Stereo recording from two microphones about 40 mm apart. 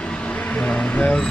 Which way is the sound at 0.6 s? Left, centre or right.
Left.